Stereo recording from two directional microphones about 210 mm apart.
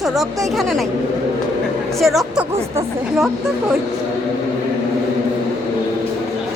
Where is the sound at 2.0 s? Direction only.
Centre (ahead or behind).